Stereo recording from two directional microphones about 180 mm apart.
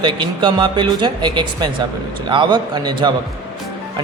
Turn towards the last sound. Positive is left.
turn(degrees=-25)  # may be behind; listen again after turning